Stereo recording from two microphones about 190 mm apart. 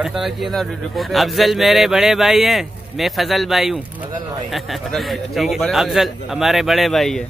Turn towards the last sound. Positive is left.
turn(degrees=0)  # may be behind; listen again after turning